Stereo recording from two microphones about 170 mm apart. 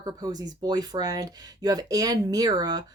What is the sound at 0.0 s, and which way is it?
Speech, 25° right (ahead or behind).